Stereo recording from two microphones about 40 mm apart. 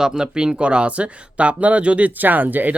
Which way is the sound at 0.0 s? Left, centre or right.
Centre.